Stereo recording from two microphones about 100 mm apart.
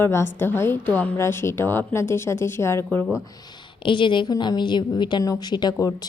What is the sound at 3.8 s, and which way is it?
A woman's voice, 50° left (ahead or behind).